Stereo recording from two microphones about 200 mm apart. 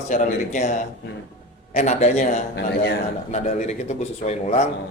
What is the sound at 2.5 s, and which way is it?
Speech, 60° left (ahead or behind).